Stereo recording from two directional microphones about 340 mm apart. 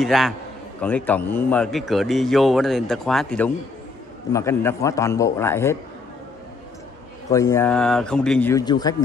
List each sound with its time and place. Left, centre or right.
0.0 s a man's voice: centre
7.2 s a man's voice: centre